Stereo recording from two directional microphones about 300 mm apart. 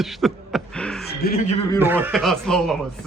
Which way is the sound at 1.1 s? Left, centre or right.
Left.